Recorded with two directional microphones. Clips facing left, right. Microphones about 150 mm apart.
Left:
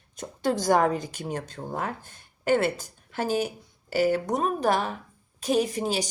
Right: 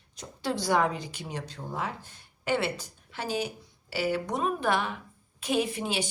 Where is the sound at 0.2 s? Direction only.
45° left (ahead or behind).